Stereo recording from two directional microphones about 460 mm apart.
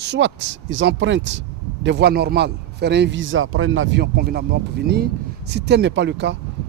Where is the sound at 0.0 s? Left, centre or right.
Right.